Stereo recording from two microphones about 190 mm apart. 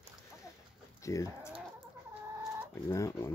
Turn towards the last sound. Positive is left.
turn(degrees=15)  # may be behind; listen again after turning